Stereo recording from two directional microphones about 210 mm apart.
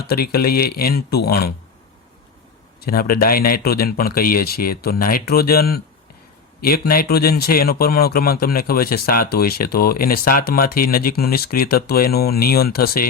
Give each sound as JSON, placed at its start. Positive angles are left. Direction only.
{"t": 0.0, "sound": "a man's voice", "side_deg": 45}
{"t": 2.8, "sound": "a man's voice", "side_deg": 45}